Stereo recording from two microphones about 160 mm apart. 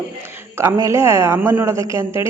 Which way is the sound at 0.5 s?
15° right (ahead or behind).